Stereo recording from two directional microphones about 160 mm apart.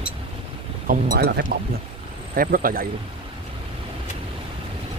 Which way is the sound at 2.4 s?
60° right (ahead or behind).